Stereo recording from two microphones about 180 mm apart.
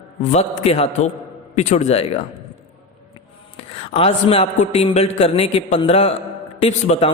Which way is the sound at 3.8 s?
30° left (ahead or behind).